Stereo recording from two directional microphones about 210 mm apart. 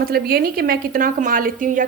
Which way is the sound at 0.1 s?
45° right (ahead or behind).